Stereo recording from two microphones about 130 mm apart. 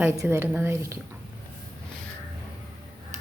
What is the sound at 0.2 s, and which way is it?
Speech, 20° right (ahead or behind).